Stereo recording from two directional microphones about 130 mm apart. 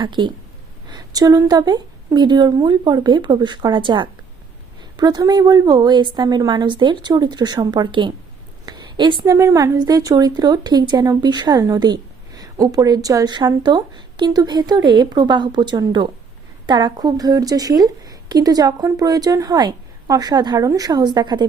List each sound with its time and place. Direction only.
0.0 s a woman's voice: 35° right (ahead or behind)